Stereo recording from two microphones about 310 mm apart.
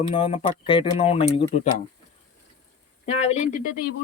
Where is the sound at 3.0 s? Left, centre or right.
Left.